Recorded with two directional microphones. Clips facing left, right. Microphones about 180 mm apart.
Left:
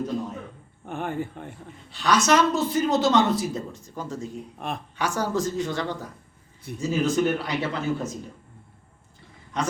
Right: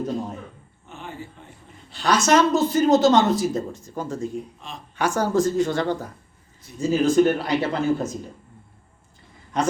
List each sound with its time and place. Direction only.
0.9 s speech: 55° left (ahead or behind)
2.0 s speech: 45° right (ahead or behind)
4.5 s speech: 55° left (ahead or behind)
4.9 s speech: 50° right (ahead or behind)
6.9 s speech: 35° right (ahead or behind)